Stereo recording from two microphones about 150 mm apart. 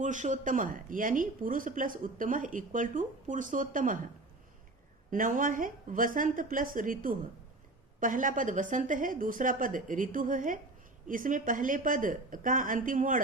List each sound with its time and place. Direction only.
0.0 s speech: 55° right (ahead or behind)
5.1 s speech: 60° right (ahead or behind)